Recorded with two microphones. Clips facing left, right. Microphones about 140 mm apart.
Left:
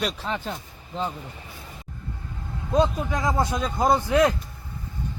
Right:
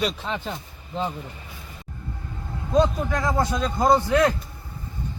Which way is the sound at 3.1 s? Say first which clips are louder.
Right 1 dB; 15° left (ahead or behind).